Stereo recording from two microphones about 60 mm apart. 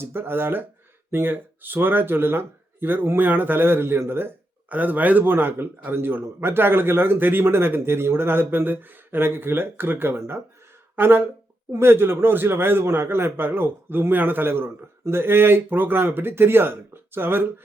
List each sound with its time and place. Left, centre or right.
0.0 s speech: right